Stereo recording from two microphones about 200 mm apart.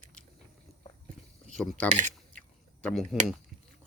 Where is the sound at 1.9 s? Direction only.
40° right (ahead or behind).